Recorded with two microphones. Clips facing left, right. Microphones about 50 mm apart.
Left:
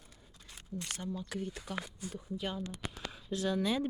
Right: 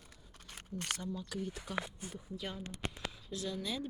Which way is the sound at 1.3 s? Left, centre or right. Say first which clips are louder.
Even; left.